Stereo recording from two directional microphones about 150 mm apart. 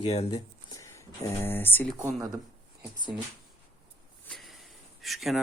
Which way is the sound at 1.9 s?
25° right (ahead or behind).